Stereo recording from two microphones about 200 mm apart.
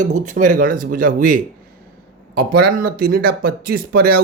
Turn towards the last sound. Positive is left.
turn(degrees=-50)  # may be behind; listen again after turning